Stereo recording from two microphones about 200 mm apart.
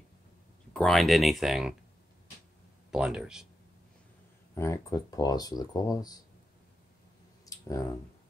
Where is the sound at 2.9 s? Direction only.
5° right (ahead or behind).